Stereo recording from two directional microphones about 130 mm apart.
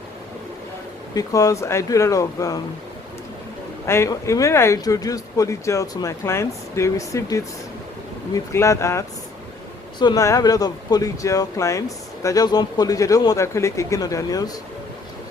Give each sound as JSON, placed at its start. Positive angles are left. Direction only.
{"t": 1.1, "sound": "speech", "side_deg": 25}
{"t": 3.8, "sound": "speech", "side_deg": 20}
{"t": 10.0, "sound": "speech", "side_deg": 35}